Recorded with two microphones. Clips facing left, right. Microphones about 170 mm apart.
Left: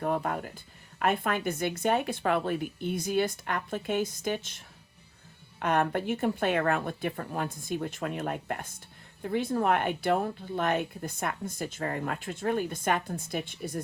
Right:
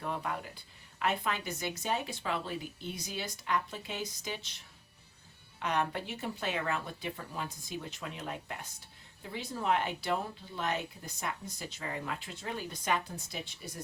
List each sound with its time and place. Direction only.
0.0 s speech: 50° left (ahead or behind)